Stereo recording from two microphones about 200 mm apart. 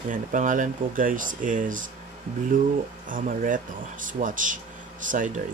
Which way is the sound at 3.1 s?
40° right (ahead or behind).